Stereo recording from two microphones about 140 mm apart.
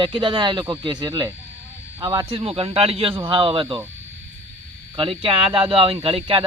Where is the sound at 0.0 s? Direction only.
35° right (ahead or behind).